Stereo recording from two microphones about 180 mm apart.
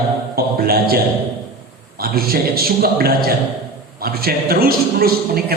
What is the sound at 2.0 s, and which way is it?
A man's voice, 55° right (ahead or behind).